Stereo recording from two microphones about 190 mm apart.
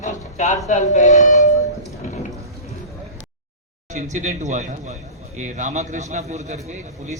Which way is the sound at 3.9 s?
40° right (ahead or behind).